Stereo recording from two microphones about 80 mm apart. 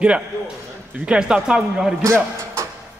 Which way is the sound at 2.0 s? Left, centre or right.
Right.